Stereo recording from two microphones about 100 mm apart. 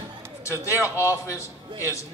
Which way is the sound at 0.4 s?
30° left (ahead or behind).